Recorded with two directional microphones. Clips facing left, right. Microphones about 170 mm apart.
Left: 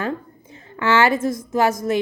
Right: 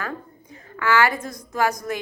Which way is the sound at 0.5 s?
25° left (ahead or behind).